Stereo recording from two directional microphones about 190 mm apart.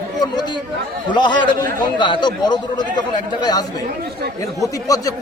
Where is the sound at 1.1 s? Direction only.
25° left (ahead or behind).